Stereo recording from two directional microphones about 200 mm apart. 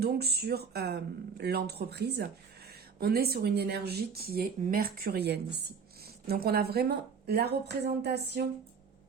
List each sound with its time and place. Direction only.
0.0 s speech: 55° right (ahead or behind)